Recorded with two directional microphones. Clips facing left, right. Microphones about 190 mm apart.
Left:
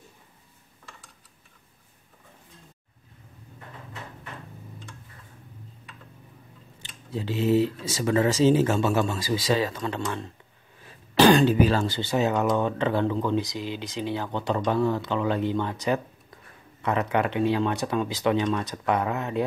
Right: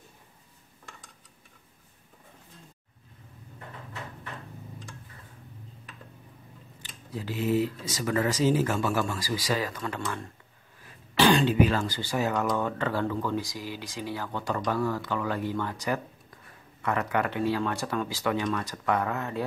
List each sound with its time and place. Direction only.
6.8 s speech: 25° left (ahead or behind)
11.1 s speech: 40° left (ahead or behind); by 19.4 s 20° left (ahead or behind)